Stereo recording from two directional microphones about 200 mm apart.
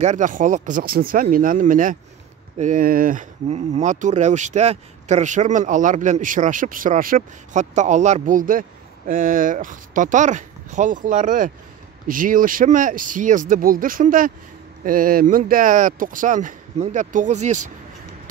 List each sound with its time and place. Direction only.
0.0 s speech: 40° right (ahead or behind)